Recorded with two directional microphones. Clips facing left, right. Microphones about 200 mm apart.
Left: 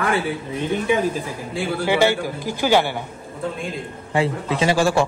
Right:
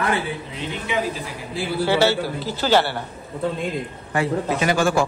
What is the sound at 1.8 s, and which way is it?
Speech, 15° left (ahead or behind).